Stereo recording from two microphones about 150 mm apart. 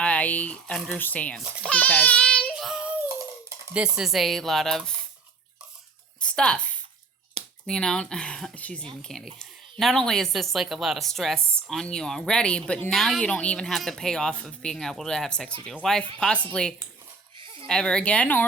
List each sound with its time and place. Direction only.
0.0 s speech: 10° left (ahead or behind)
1.6 s a sound: 10° left (ahead or behind)
2.5 s child singing: 5° right (ahead or behind)
3.8 s speech: 5° right (ahead or behind)
6.1 s a woman's voice: 5° left (ahead or behind)
7.4 s a sound: 45° right (ahead or behind)
7.7 s speech: 5° left (ahead or behind)
17.4 s a sound: 35° right (ahead or behind)
17.7 s speech: 5° left (ahead or behind)